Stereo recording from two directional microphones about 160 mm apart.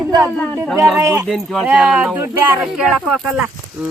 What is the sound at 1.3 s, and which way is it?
Speech, centre (ahead or behind).